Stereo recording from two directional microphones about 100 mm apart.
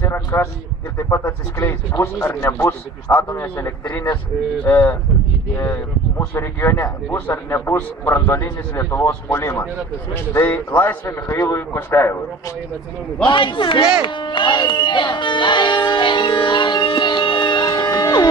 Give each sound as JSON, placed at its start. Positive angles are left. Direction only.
{"t": 0.0, "sound": "a sound", "side_deg": 25}
{"t": 0.9, "sound": "speech", "side_deg": 25}
{"t": 13.3, "sound": "a man's voice", "side_deg": 50}
{"t": 17.6, "sound": "music", "side_deg": 40}